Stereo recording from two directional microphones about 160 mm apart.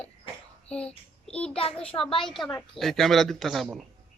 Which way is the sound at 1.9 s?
25° left (ahead or behind).